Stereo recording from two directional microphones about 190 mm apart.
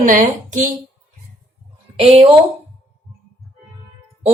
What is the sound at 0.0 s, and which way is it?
Speech, 40° right (ahead or behind).